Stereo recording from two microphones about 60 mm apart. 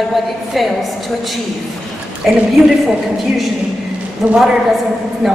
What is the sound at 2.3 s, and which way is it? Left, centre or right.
Speech, centre.